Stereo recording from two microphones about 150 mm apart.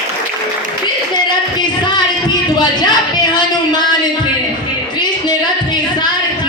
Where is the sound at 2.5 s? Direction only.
30° left (ahead or behind).